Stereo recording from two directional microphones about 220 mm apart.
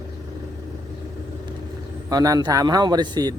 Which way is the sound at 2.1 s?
15° right (ahead or behind).